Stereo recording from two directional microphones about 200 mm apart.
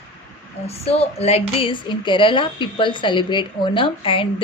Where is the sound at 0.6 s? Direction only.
30° left (ahead or behind).